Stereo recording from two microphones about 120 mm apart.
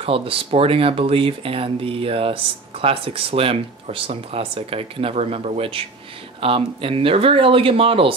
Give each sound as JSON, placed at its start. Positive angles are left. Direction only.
{"t": 0.0, "sound": "speech", "side_deg": -50}